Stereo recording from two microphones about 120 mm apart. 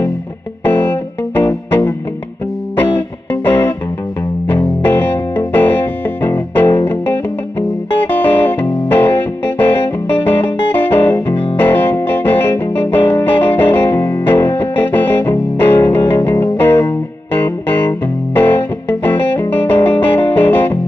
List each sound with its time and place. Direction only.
0.7 s music: 15° left (ahead or behind)
4.8 s music: 15° left (ahead or behind)
8.1 s music: 15° left (ahead or behind)